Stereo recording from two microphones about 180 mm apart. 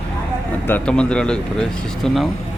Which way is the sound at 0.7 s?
5° left (ahead or behind).